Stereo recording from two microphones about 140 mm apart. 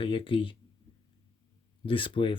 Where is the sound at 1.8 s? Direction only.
40° left (ahead or behind).